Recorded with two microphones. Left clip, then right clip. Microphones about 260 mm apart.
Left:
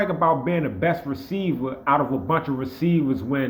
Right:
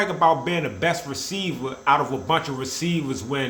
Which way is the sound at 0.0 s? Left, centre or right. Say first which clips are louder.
Right 1 dB; centre.